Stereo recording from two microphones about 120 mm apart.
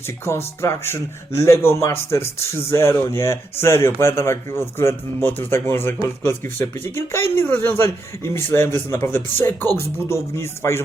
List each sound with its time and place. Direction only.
0.3 s speech: 20° left (ahead or behind)